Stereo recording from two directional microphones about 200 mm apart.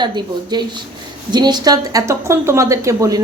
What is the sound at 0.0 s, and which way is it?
A woman's voice, 20° right (ahead or behind).